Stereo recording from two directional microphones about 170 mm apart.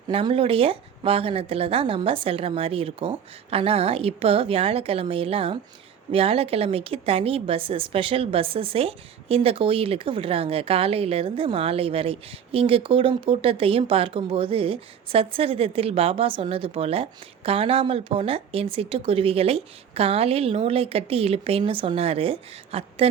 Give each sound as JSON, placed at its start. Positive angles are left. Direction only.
{"t": 0.1, "sound": "a woman's voice", "side_deg": -35}